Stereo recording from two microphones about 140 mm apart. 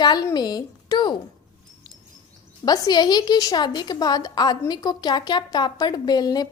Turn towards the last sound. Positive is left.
turn(degrees=30)  # may be behind; listen again after turning